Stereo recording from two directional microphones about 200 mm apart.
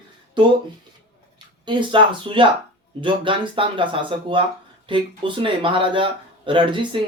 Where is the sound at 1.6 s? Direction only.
25° right (ahead or behind).